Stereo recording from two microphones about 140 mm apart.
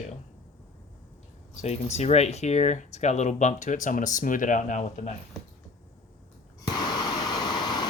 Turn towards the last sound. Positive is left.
turn(degrees=30)  # may be behind; listen again after turning